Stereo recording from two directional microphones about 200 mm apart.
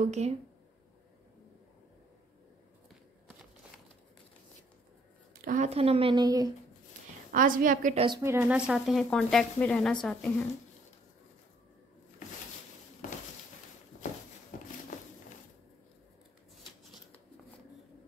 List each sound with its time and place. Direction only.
0.0 s a woman's voice: 35° right (ahead or behind)
5.4 s speech: 40° right (ahead or behind); by 6.5 s 20° right (ahead or behind)
7.3 s a woman's voice: 40° right (ahead or behind)
8.2 s speech: 15° right (ahead or behind); by 10.3 s 5° left (ahead or behind)
14.5 s a sound: 40° left (ahead or behind)